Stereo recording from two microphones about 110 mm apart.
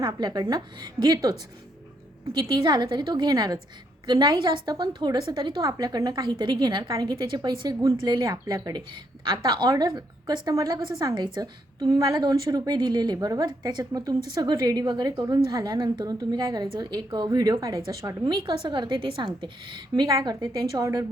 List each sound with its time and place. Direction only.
0.0 s a woman's voice: 40° right (ahead or behind)
20.1 s a woman's voice: 35° right (ahead or behind)